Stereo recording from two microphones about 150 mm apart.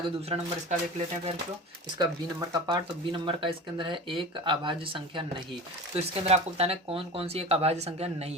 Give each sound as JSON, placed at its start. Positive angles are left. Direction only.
{"t": 0.3, "sound": "speech", "side_deg": -45}
{"t": 2.0, "sound": "speech", "side_deg": -25}
{"t": 6.0, "sound": "speech", "side_deg": -45}